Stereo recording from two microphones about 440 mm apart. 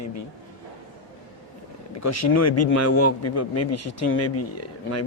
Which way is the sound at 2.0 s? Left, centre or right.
Left.